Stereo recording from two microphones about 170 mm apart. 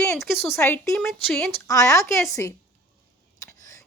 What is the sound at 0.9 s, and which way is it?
Speech, centre (ahead or behind).